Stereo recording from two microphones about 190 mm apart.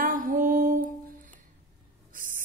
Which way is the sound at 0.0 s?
45° right (ahead or behind).